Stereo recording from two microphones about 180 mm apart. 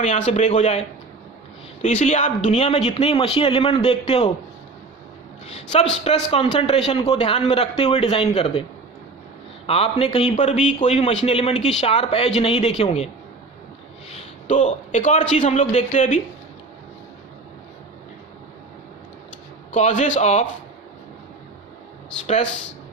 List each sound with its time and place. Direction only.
0.0 s speech: 40° left (ahead or behind)
1.8 s speech: 35° left (ahead or behind)
6.3 s speech: 30° left (ahead or behind)
9.6 s speech: 35° left (ahead or behind)
14.1 s a man's voice: 35° left (ahead or behind)
19.7 s speech: 40° left (ahead or behind)